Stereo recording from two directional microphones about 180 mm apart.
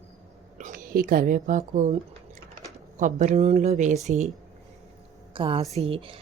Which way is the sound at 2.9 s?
40° right (ahead or behind).